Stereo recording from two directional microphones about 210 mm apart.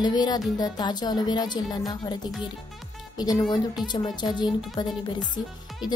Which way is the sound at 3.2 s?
20° left (ahead or behind).